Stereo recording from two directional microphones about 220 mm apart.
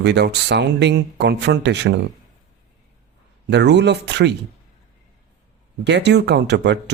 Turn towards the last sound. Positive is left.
turn(degrees=-50)  # may be behind; listen again after turning